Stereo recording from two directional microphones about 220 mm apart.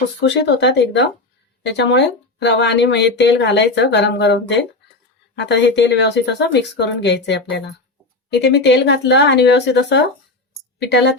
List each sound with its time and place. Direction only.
0.2 s a woman's voice: 50° left (ahead or behind)